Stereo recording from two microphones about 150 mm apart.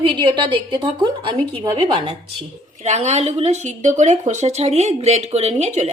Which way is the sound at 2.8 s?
50° right (ahead or behind).